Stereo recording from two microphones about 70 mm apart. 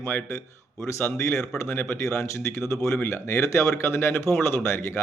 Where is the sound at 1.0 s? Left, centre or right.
Left.